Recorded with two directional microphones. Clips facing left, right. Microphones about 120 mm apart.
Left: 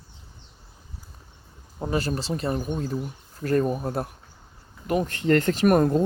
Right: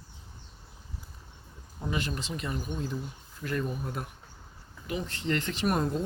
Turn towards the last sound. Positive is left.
turn(degrees=55)  # may be behind; listen again after turning